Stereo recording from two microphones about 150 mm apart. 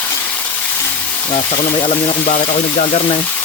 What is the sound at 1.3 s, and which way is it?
Speech, 35° left (ahead or behind).